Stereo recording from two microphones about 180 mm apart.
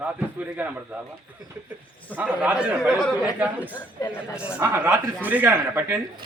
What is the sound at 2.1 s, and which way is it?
Speech, 10° right (ahead or behind).